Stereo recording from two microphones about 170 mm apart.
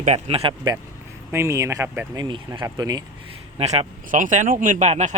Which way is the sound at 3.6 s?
40° right (ahead or behind).